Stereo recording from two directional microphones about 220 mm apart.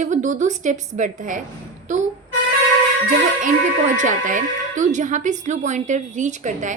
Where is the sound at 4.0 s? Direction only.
35° right (ahead or behind).